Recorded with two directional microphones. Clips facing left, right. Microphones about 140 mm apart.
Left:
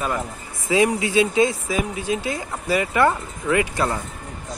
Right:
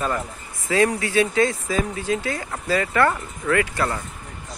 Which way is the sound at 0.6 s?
15° left (ahead or behind).